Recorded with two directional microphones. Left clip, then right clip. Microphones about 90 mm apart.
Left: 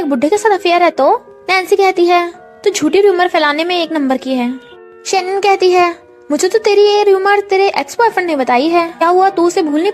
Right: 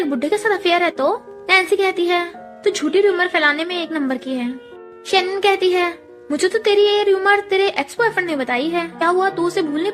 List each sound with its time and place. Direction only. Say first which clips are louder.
0.0 s a woman's voice: left 7 dB; 65° left (ahead or behind); by 4.5 s 90° left
5.4 s speech: left 6 dB; 65° left (ahead or behind)